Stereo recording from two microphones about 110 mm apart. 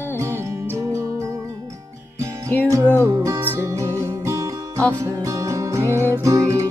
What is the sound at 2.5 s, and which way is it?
Music, 15° left (ahead or behind).